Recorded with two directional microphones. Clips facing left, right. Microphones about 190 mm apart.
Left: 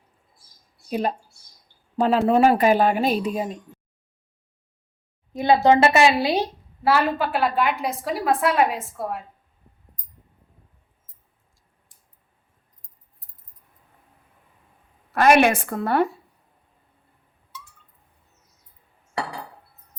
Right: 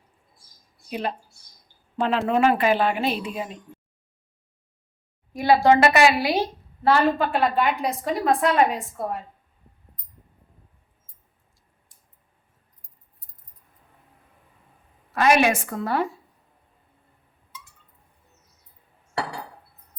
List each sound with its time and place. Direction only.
0.9 s a woman's voice: 40° left (ahead or behind)
5.3 s a woman's voice: 20° left (ahead or behind)
6.8 s a woman's voice: 5° left (ahead or behind)
15.1 s a woman's voice: 55° left (ahead or behind)